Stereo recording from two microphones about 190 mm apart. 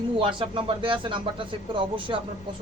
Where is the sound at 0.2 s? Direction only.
25° right (ahead or behind).